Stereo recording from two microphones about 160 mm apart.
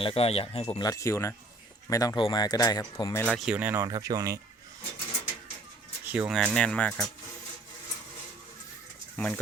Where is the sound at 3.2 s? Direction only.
5° right (ahead or behind).